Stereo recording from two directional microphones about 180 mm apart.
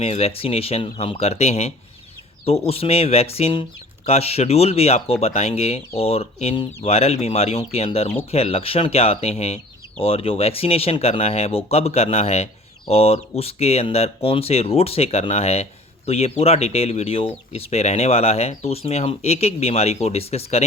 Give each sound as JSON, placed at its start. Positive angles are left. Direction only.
{"t": 0.0, "sound": "speech", "side_deg": 35}